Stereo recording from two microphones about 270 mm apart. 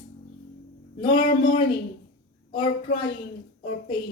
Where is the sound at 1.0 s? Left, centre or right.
Centre.